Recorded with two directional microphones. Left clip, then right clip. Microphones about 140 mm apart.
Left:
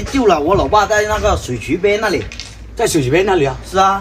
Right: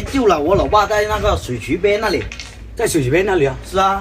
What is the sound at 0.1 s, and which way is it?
Speech, 5° left (ahead or behind).